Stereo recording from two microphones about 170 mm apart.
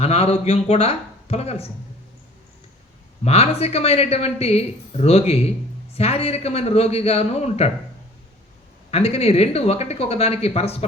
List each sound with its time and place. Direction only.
0.0 s speech: 35° left (ahead or behind)
3.2 s speech: 35° left (ahead or behind)
8.9 s speech: 35° left (ahead or behind)